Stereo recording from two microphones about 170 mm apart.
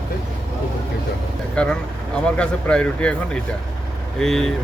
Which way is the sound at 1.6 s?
5° left (ahead or behind).